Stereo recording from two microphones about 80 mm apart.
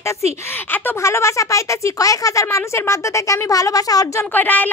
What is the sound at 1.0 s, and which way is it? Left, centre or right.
Speech, left.